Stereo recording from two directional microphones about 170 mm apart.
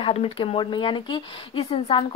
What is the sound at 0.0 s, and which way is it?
A woman's voice, 35° left (ahead or behind).